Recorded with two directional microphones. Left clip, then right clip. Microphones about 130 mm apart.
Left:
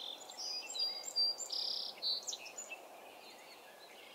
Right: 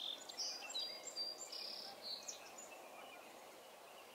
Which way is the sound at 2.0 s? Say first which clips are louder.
Left 12 dB; 55° left (ahead or behind).